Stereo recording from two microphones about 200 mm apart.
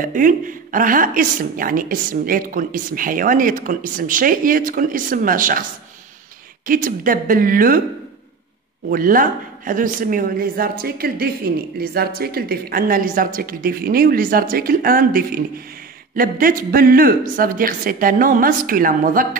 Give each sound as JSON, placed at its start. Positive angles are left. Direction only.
{"t": 0.0, "sound": "speech", "side_deg": -40}
{"t": 8.9, "sound": "speech", "side_deg": -45}